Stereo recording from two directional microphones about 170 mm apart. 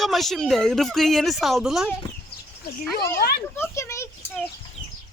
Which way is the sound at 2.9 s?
15° left (ahead or behind).